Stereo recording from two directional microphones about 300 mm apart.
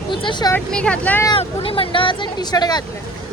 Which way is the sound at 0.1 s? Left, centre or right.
Centre.